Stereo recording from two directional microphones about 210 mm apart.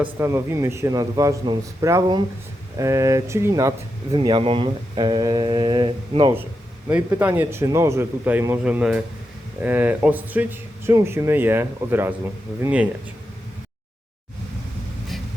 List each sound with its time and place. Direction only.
0.0 s speech: 10° right (ahead or behind)
6.8 s speech: 10° right (ahead or behind)